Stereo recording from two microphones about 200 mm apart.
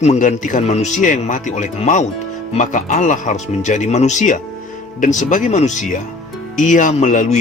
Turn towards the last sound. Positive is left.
turn(degrees=40)  # may be behind; listen again after turning